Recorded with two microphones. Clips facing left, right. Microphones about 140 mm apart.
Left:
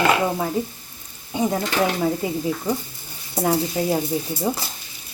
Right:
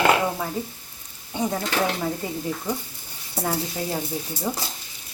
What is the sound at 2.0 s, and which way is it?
A woman's voice, 20° left (ahead or behind).